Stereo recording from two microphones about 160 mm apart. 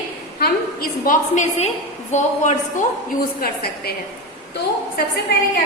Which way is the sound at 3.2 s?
70° left (ahead or behind).